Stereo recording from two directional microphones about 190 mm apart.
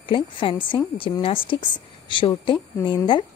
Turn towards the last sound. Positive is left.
turn(degrees=25)  # may be behind; listen again after turning